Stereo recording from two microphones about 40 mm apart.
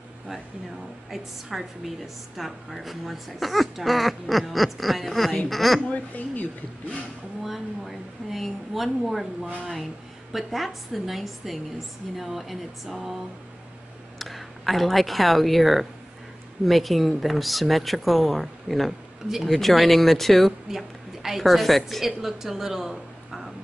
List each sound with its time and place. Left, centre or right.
1.1 s a woman's voice: centre
6.1 s speech: left
7.4 s speech: centre
14.1 s speech: centre
20.6 s a woman's voice: centre
22.0 s a woman's voice: centre